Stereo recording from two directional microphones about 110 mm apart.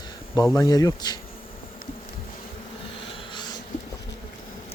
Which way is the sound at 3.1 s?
45° left (ahead or behind).